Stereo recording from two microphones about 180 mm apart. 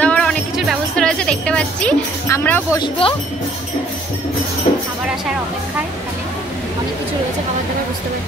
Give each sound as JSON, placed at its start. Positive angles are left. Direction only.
{"t": 0.0, "sound": "music", "side_deg": 5}
{"t": 2.8, "sound": "speech", "side_deg": 30}